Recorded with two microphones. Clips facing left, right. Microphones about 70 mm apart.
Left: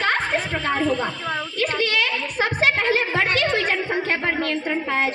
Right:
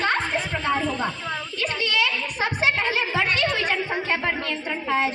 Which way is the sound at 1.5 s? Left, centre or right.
Left.